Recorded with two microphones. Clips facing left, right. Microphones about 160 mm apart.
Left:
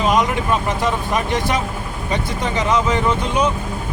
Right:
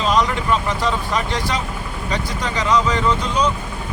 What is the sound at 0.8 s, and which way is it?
Speech, 20° left (ahead or behind).